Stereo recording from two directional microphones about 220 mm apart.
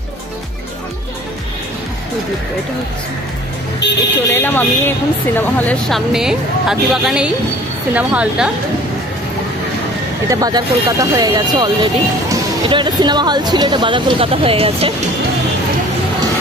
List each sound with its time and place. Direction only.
3.8 s speech: 50° left (ahead or behind)
4.3 s speech: 10° left (ahead or behind)
10.3 s speech: 15° right (ahead or behind)